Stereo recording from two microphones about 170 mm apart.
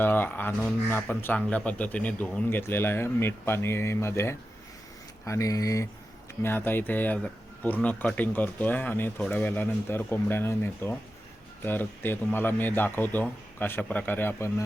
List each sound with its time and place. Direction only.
0.0 s speech: 10° left (ahead or behind)